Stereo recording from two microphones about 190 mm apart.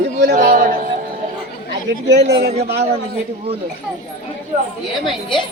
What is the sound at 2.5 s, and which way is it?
Speech, 30° right (ahead or behind).